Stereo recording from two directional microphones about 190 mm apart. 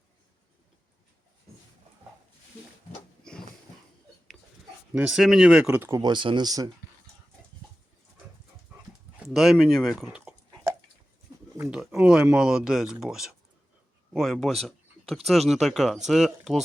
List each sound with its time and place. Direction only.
3.3 s a sound: 5° left (ahead or behind)
4.9 s speech: centre (ahead or behind)
5.9 s speech: 20° right (ahead or behind)
9.1 s speech: centre (ahead or behind)
10.5 s a sound: 15° right (ahead or behind)
11.3 s bird: 20° right (ahead or behind)
11.7 s speech: centre (ahead or behind)